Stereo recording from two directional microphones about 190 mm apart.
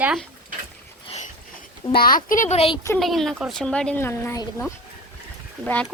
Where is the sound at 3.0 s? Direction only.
Centre (ahead or behind).